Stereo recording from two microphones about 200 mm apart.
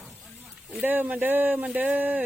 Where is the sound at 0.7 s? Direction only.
10° right (ahead or behind).